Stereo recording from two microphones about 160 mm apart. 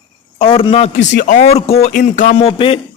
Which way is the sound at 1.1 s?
75° left (ahead or behind).